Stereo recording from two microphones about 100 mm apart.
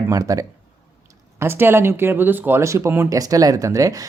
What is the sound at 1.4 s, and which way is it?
Speech, 25° right (ahead or behind).